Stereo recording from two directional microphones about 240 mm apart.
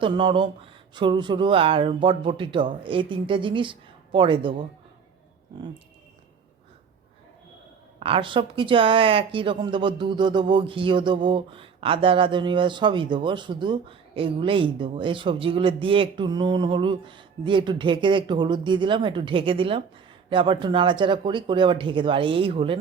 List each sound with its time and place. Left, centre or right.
0.0 s a woman's voice: right
7.9 s a woman's voice: right